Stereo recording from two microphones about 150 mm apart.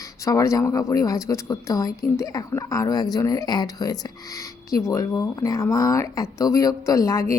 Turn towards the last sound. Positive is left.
turn(degrees=20)  # may be behind; listen again after turning